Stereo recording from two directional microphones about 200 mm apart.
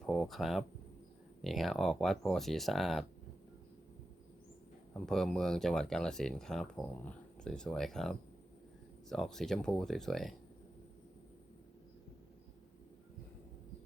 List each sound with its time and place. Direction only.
0.0 s speech: centre (ahead or behind)
4.9 s speech: centre (ahead or behind)